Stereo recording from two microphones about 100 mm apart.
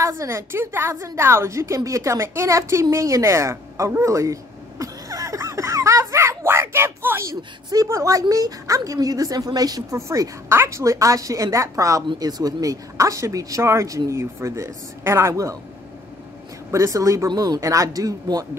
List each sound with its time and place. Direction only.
0.0 s a woman's voice: 30° right (ahead or behind)
1.8 s a sound: 35° right (ahead or behind)
7.7 s a woman's voice: 35° right (ahead or behind)
12.1 s a woman's voice: 40° right (ahead or behind)
16.7 s a woman's voice: 35° right (ahead or behind)